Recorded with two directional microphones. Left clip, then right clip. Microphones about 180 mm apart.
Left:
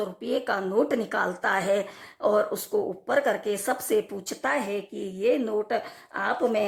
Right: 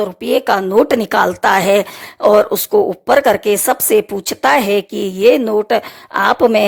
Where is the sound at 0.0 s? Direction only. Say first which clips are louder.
Right 13 dB; 50° right (ahead or behind).